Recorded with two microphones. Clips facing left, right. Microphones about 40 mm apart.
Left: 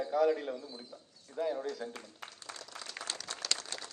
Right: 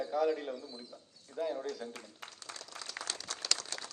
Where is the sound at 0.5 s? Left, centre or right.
Left.